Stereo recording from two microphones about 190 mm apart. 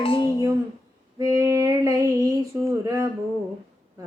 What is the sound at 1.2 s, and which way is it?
Female singing, 15° right (ahead or behind).